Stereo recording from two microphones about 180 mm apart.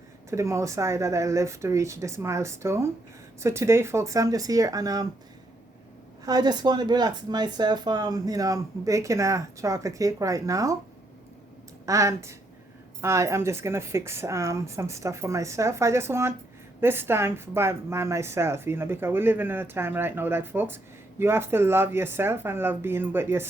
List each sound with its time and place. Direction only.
0.3 s a woman's voice: 15° right (ahead or behind)
6.2 s speech: 20° right (ahead or behind)
11.9 s a woman's voice: 15° right (ahead or behind)